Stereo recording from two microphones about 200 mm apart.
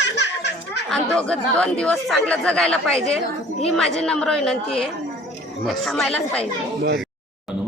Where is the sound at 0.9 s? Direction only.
5° left (ahead or behind).